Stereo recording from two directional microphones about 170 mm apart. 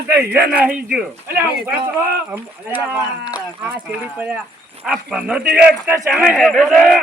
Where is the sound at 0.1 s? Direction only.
10° right (ahead or behind).